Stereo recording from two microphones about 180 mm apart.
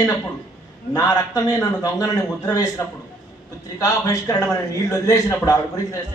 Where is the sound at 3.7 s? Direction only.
20° left (ahead or behind).